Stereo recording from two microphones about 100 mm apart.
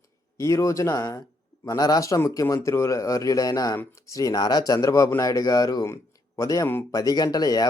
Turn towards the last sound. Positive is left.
turn(degrees=40)  # may be behind; listen again after turning